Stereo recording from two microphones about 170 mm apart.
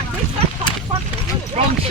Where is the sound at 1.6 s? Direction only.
40° right (ahead or behind).